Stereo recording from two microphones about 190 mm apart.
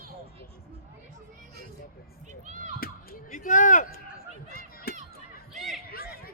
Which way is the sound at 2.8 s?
50° left (ahead or behind).